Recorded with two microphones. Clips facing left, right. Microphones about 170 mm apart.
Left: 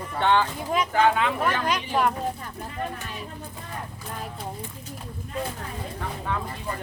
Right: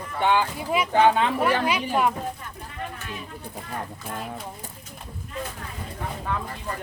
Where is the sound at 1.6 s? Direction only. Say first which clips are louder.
Right 1 dB; 5° right (ahead or behind).